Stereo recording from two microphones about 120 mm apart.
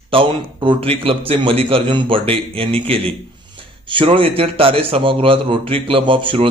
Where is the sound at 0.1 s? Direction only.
45° right (ahead or behind).